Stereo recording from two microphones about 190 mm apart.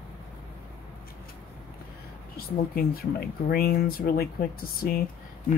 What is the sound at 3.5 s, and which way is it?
Speech, 55° left (ahead or behind).